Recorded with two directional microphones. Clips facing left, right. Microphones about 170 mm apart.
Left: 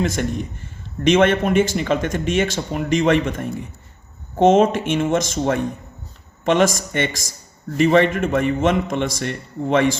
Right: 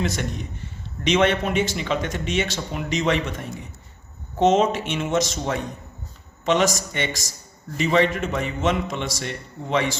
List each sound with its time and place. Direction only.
0.0 s speech: 50° left (ahead or behind)